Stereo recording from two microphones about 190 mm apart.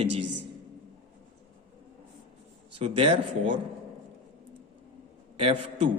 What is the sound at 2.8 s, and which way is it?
Speech, 30° right (ahead or behind).